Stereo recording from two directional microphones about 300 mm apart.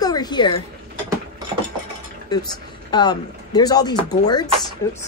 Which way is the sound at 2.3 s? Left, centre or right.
Centre.